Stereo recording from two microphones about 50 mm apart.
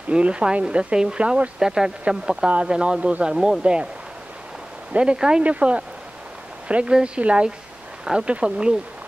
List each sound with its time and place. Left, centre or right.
0.1 s speech: right
4.9 s speech: centre
5.4 s speech: right